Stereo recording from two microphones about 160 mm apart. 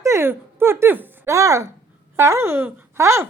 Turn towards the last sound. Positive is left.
turn(degrees=-15)  # may be behind; listen again after turning